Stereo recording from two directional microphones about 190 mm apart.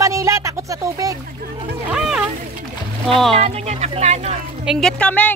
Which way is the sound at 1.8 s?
5° right (ahead or behind).